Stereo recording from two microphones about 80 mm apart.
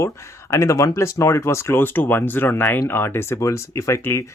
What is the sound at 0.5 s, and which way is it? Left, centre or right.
Speech, left.